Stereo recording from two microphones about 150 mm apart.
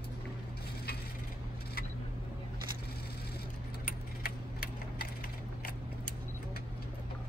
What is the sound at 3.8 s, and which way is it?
Tick-tock, 90° left.